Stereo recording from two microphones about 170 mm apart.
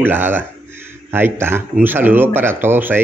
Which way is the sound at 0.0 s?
10° right (ahead or behind).